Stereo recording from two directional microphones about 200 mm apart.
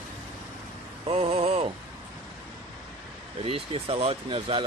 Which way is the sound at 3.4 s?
30° right (ahead or behind).